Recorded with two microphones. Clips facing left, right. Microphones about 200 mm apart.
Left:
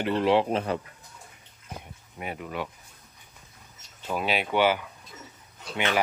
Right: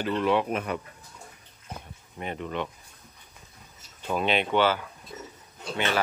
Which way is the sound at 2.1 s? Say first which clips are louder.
Right 2 dB; 5° left (ahead or behind).